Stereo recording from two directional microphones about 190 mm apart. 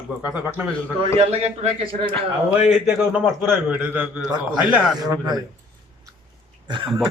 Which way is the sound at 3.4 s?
10° right (ahead or behind).